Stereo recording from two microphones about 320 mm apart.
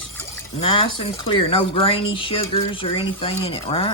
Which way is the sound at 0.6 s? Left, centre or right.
Centre.